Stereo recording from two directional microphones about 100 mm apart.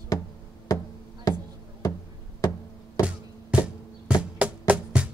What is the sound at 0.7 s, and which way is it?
Music, 40° left (ahead or behind).